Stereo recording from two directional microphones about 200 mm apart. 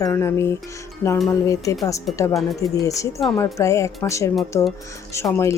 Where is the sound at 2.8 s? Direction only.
15° left (ahead or behind).